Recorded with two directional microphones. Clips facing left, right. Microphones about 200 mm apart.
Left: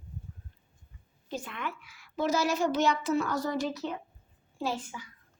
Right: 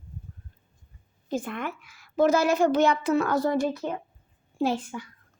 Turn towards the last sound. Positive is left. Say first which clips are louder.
# right 7 dB
turn(degrees=-60)  # may be behind; listen again after turning